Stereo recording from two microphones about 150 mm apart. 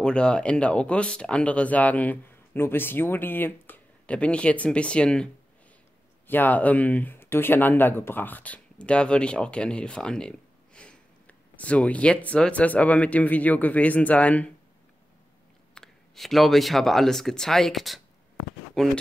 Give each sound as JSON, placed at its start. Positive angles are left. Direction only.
{"t": 0.0, "sound": "speech", "side_deg": 5}
{"t": 15.7, "sound": "speech", "side_deg": 0}